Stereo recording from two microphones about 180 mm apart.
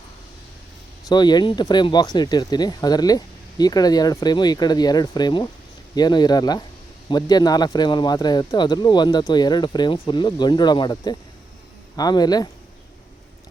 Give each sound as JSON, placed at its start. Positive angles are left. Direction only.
{"t": 1.0, "sound": "speech", "side_deg": 25}